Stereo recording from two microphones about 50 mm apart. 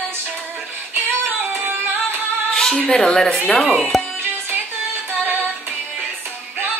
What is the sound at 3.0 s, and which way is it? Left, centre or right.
A woman's voice, centre.